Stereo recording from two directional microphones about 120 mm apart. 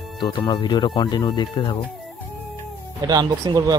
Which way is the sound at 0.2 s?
35° left (ahead or behind).